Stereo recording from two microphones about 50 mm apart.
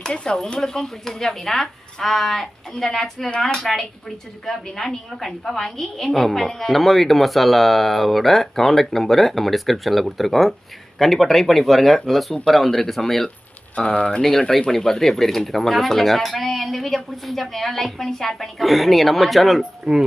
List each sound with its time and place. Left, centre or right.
0.0 s a woman's voice: centre
13.7 s speech: left
14.2 s a woman's voice: centre